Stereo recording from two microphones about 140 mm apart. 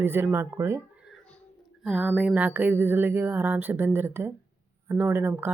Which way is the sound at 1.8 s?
5° right (ahead or behind).